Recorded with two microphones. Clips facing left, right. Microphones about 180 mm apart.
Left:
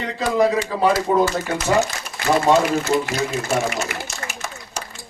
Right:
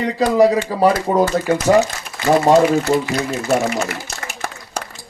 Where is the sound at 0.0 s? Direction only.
35° right (ahead or behind).